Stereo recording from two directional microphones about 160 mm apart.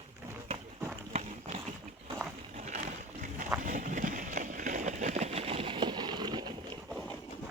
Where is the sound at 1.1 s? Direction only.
40° right (ahead or behind).